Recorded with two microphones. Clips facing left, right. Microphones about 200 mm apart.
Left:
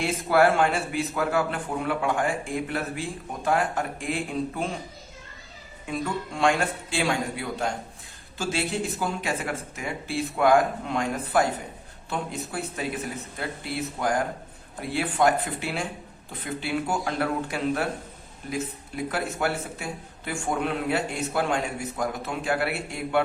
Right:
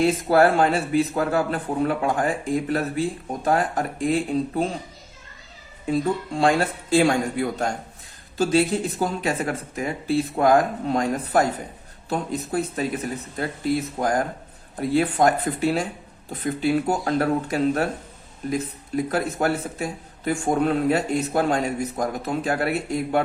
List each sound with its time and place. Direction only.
0.0 s a man's voice: 35° right (ahead or behind)
5.9 s a man's voice: 35° right (ahead or behind)
14.0 s a man's voice: 40° right (ahead or behind)
19.0 s a man's voice: 40° right (ahead or behind)